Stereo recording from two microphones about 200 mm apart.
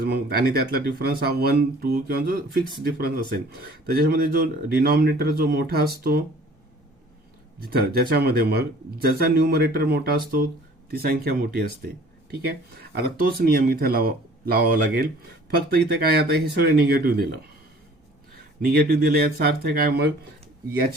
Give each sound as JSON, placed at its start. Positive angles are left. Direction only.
{"t": 0.0, "sound": "speech", "side_deg": -50}
{"t": 7.6, "sound": "speech", "side_deg": -50}
{"t": 12.8, "sound": "speech", "side_deg": -50}